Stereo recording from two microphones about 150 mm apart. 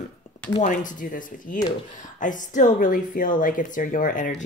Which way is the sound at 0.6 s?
60° left (ahead or behind).